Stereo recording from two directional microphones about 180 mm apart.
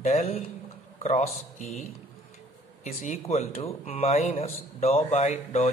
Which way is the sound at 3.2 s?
35° left (ahead or behind).